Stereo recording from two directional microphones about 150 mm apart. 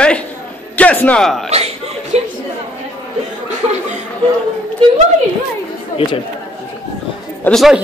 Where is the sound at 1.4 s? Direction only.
45° right (ahead or behind).